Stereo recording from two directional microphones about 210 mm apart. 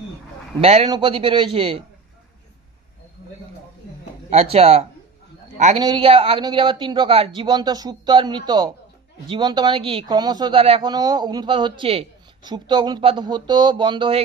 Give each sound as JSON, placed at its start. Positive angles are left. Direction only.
{"t": 0.6, "sound": "a man's voice", "side_deg": -30}
{"t": 4.3, "sound": "speech", "side_deg": -30}